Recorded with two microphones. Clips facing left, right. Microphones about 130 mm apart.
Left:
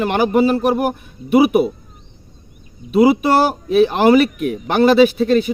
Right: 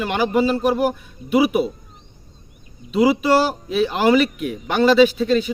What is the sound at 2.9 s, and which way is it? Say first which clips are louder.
Speech: left 3 dB; 50° left (ahead or behind).